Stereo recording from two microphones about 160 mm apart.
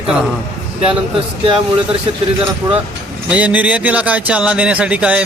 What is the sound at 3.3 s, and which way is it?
Speech, 10° right (ahead or behind).